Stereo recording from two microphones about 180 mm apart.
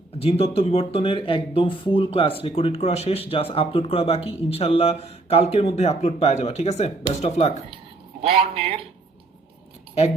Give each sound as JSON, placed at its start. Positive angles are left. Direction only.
{"t": 0.2, "sound": "speech", "side_deg": 35}
{"t": 8.5, "sound": "speech", "side_deg": -35}